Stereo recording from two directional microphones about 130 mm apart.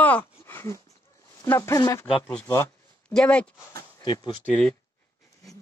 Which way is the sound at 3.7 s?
25° left (ahead or behind).